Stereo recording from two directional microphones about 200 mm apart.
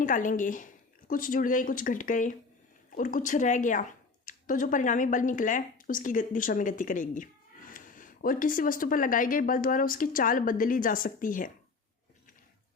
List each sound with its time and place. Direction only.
0.0 s a woman's voice: 40° left (ahead or behind)